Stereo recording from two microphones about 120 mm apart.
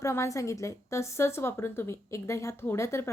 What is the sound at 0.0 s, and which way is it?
A woman's voice, 25° left (ahead or behind).